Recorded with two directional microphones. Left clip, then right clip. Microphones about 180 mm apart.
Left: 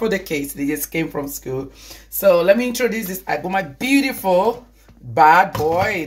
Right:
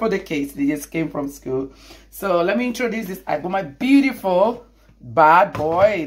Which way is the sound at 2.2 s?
25° right (ahead or behind).